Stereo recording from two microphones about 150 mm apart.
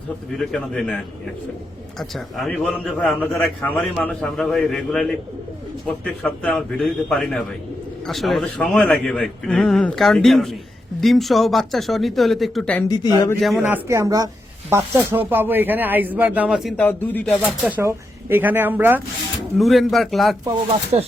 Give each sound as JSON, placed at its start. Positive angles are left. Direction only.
{"t": 0.3, "sound": "a man's voice", "side_deg": 5}
{"t": 2.0, "sound": "a man's voice", "side_deg": 0}
{"t": 13.6, "sound": "a man's voice", "side_deg": -15}
{"t": 14.7, "sound": "speech", "side_deg": -15}
{"t": 16.8, "sound": "a man's voice", "side_deg": 10}
{"t": 17.7, "sound": "speech", "side_deg": -15}
{"t": 19.5, "sound": "a man's voice", "side_deg": 0}
{"t": 20.4, "sound": "speech", "side_deg": -30}